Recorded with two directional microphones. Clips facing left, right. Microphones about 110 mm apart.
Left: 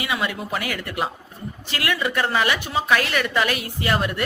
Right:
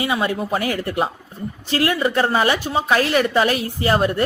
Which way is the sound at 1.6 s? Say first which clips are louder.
Right 6 dB; 30° right (ahead or behind).